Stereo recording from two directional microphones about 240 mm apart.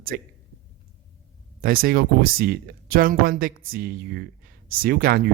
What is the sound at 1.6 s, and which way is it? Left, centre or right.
A man's voice, right.